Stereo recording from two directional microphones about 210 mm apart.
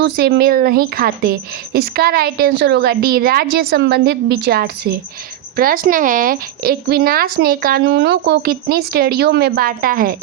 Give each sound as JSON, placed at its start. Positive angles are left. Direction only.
{"t": 0.0, "sound": "a woman's voice", "side_deg": -50}